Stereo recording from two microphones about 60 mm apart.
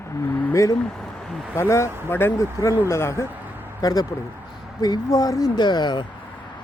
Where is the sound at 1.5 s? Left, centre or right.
Left.